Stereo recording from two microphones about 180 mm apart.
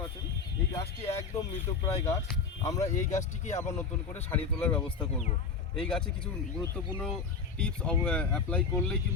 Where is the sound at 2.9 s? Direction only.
40° left (ahead or behind).